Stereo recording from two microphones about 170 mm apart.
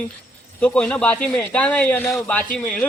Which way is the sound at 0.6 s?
5° left (ahead or behind).